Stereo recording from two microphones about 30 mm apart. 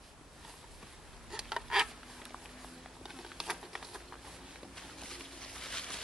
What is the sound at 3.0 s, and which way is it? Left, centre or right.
Patter, centre.